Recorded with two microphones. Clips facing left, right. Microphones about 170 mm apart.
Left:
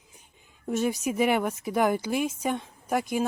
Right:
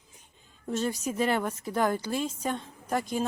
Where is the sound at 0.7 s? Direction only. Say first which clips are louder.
Left 3 dB; 15° left (ahead or behind).